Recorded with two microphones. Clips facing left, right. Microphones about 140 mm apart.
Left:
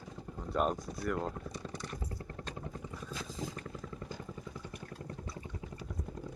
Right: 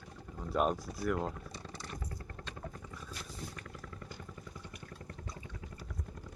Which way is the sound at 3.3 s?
90° left.